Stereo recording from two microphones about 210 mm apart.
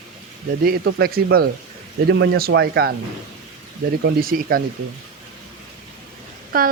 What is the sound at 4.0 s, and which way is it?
Speech, 45° right (ahead or behind).